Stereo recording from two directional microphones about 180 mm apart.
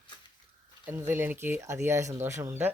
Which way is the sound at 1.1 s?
10° right (ahead or behind).